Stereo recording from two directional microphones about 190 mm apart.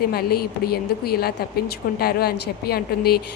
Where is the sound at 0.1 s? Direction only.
55° left (ahead or behind).